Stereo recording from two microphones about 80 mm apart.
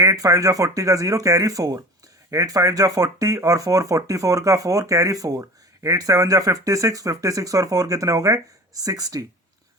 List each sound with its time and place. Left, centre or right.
0.0 s speech: right